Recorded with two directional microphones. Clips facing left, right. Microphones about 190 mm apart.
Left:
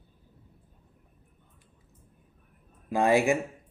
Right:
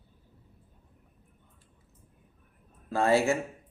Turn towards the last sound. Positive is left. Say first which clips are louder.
# left 1 dB
turn(degrees=15)  # may be behind; listen again after turning